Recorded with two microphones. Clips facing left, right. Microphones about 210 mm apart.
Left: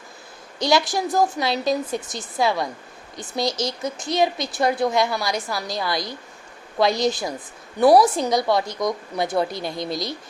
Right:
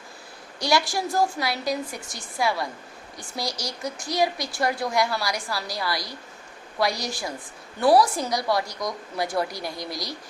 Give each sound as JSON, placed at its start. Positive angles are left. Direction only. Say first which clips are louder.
{"t": 0.6, "sound": "speech", "louder": "left 4 dB", "side_deg": 20}